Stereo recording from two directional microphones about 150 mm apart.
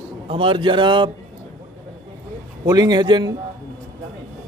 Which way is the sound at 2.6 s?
25° right (ahead or behind).